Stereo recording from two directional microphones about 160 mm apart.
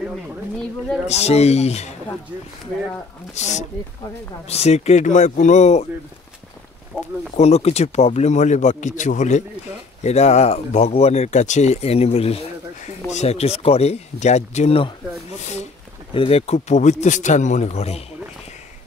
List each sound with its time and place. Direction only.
1.0 s speech: 40° left (ahead or behind)
3.3 s speech: 45° left (ahead or behind)
7.3 s speech: 40° left (ahead or behind)
16.1 s speech: 35° left (ahead or behind)